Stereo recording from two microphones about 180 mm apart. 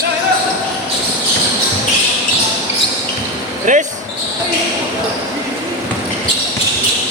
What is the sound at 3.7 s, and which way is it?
Basketball bounce, 45° right (ahead or behind).